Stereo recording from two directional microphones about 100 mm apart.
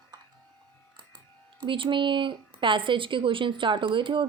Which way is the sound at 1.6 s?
55° right (ahead or behind).